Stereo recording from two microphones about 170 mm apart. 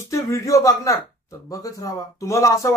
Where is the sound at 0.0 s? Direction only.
15° left (ahead or behind).